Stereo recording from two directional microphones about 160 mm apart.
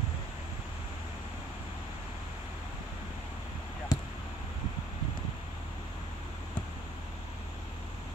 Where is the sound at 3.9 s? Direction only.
25° left (ahead or behind).